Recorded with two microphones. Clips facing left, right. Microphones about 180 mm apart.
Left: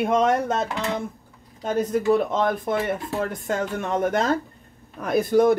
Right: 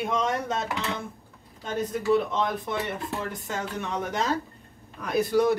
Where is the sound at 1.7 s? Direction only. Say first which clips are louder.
Left 4 dB; 50° left (ahead or behind).